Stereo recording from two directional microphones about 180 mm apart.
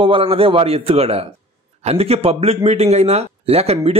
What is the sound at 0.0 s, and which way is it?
Speech, 30° right (ahead or behind).